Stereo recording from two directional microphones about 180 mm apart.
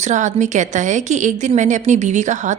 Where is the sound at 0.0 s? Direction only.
40° right (ahead or behind).